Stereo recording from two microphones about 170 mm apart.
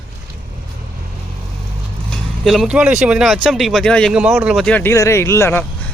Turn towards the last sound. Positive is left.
turn(degrees=15)  # may be behind; listen again after turning